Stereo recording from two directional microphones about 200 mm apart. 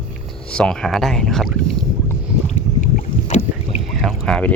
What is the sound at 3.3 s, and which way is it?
Boat, 35° left (ahead or behind).